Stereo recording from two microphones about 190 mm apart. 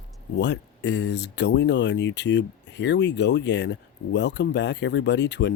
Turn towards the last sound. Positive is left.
turn(degrees=65)  # may be behind; listen again after turning